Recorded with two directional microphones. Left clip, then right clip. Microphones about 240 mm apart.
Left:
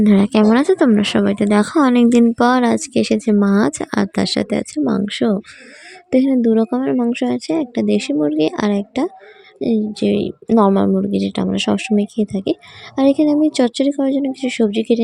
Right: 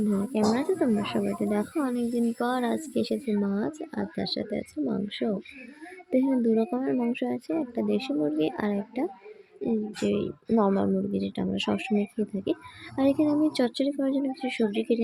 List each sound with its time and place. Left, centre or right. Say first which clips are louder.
0.0 s speech: left 12 dB; left